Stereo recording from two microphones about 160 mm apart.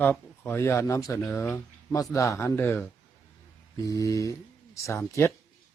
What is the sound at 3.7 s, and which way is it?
Mantra, 20° left (ahead or behind).